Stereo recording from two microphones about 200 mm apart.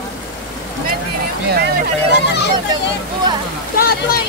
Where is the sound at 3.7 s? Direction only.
50° left (ahead or behind).